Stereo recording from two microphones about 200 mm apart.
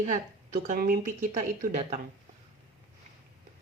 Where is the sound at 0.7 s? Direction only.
40° right (ahead or behind).